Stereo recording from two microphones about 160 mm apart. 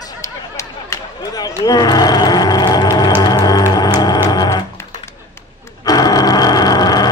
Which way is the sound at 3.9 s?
25° left (ahead or behind).